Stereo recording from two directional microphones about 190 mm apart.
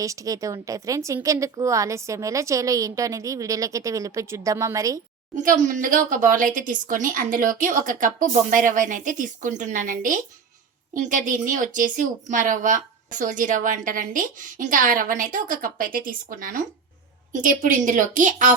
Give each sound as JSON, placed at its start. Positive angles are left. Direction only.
{"t": 0.0, "sound": "a woman's voice", "side_deg": -15}
{"t": 5.4, "sound": "speech", "side_deg": -45}